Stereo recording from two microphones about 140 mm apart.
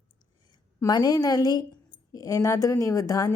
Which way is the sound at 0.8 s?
25° left (ahead or behind).